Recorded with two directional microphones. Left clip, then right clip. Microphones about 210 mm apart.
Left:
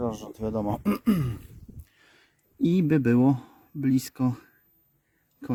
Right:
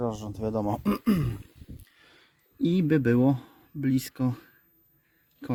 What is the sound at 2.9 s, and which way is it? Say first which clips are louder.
Speech: even; 20° left (ahead or behind).